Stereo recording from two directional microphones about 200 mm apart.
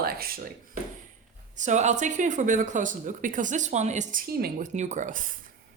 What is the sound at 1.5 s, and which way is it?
Speech, 35° right (ahead or behind).